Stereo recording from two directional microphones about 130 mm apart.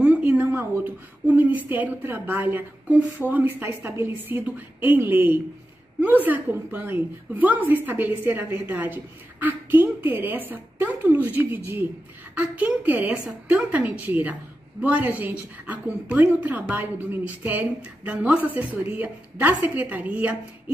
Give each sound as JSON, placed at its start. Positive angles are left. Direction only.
{"t": 0.0, "sound": "a woman's voice", "side_deg": -10}